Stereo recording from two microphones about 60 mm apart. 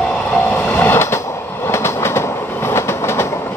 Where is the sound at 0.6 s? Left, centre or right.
Left.